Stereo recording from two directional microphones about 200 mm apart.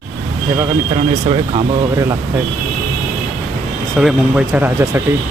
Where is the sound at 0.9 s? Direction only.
25° right (ahead or behind).